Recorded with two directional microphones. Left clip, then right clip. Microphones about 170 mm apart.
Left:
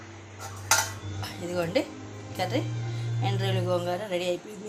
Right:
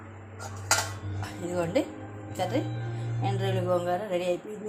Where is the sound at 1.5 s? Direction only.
Centre (ahead or behind).